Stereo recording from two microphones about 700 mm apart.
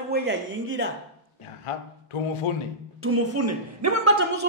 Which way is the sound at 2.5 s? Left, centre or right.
Left.